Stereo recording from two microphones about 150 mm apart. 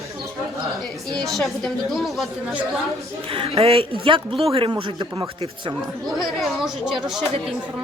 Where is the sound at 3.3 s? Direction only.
40° right (ahead or behind).